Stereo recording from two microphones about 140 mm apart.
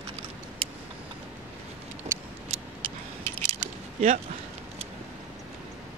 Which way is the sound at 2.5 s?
50° right (ahead or behind).